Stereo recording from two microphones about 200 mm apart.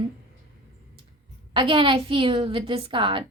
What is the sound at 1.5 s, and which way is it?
A woman's voice, 25° right (ahead or behind).